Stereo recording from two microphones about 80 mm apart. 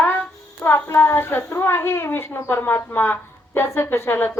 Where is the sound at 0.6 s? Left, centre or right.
Left.